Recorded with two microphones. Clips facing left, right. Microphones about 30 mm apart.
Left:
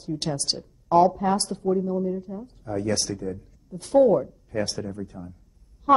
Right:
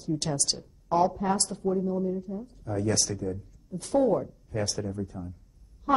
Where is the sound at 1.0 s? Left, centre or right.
Centre.